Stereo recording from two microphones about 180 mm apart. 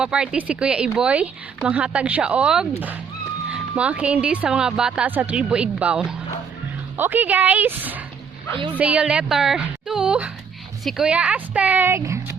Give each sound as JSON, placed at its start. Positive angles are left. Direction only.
{"t": 0.0, "sound": "a woman's voice", "side_deg": -5}